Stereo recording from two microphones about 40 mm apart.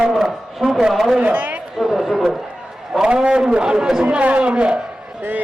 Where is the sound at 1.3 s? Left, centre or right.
Right.